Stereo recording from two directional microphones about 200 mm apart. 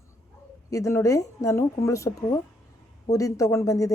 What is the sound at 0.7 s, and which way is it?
A woman's voice, 15° left (ahead or behind).